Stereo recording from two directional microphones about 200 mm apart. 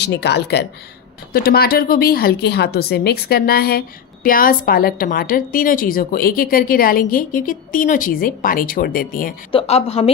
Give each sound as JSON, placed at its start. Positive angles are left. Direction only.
{"t": 0.0, "sound": "a woman's voice", "side_deg": 55}
{"t": 9.5, "sound": "a woman's voice", "side_deg": 30}